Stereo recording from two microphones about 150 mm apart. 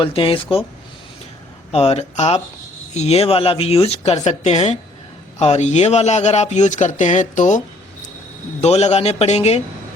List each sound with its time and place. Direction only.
0.0 s speech: 35° left (ahead or behind)
1.7 s speech: 45° left (ahead or behind)
8.6 s speech: 45° left (ahead or behind)